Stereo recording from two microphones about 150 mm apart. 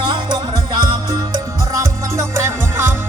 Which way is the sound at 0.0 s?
30° right (ahead or behind).